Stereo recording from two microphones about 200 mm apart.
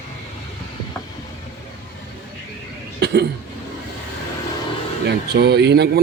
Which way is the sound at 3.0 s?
55° right (ahead or behind).